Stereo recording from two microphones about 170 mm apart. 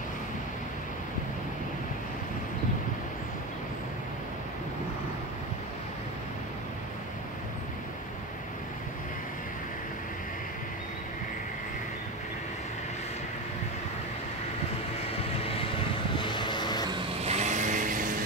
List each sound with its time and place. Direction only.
16.2 s vehicle: 30° left (ahead or behind)
16.9 s vehicle: 40° right (ahead or behind)